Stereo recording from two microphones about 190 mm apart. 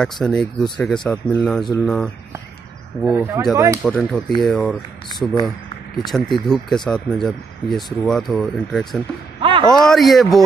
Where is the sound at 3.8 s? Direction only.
5° left (ahead or behind).